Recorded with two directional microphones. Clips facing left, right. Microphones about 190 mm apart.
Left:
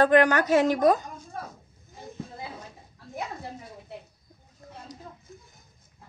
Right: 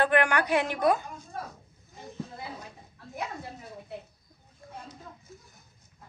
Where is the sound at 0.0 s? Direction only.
40° left (ahead or behind).